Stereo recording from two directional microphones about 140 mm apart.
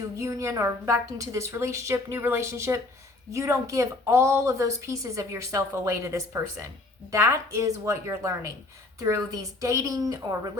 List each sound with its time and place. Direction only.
0.2 s a woman's voice: 20° right (ahead or behind)